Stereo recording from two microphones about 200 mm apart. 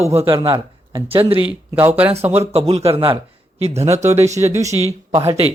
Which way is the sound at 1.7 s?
10° right (ahead or behind).